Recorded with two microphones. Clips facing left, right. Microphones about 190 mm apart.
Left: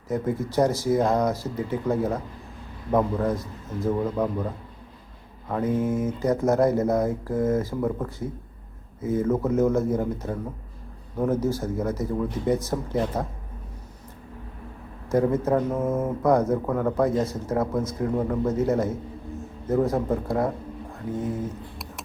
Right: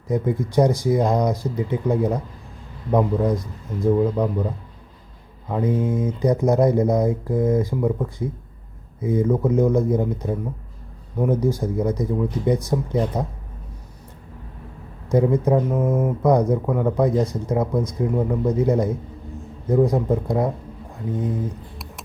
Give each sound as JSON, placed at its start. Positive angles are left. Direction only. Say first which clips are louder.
{"t": 0.1, "sound": "speech", "louder": "right 4 dB", "side_deg": -15}
{"t": 11.4, "sound": "speech", "louder": "right 4 dB", "side_deg": -15}
{"t": 15.1, "sound": "speech", "louder": "right 3 dB", "side_deg": -15}